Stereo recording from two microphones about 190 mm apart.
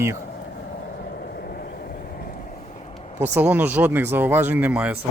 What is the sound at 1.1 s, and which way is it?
Vehicle, 60° left (ahead or behind).